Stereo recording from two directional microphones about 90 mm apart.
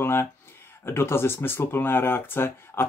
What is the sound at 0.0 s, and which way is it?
Speech, 25° left (ahead or behind).